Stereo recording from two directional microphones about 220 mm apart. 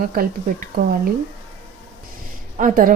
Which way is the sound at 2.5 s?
35° right (ahead or behind).